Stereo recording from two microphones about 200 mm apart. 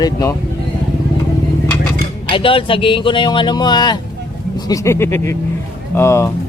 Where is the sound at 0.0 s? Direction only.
20° left (ahead or behind).